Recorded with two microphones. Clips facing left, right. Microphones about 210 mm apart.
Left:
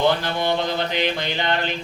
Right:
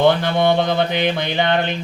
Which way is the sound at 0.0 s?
55° right (ahead or behind).